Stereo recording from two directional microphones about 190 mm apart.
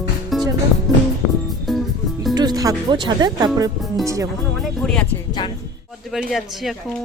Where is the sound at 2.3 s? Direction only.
20° right (ahead or behind).